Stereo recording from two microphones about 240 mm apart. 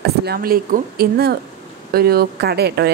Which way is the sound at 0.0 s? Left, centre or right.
Right.